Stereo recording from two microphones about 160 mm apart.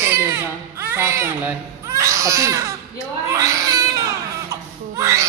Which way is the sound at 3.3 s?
20° right (ahead or behind).